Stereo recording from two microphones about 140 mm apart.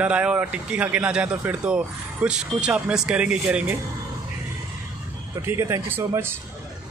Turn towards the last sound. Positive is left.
turn(degrees=-20)  # may be behind; listen again after turning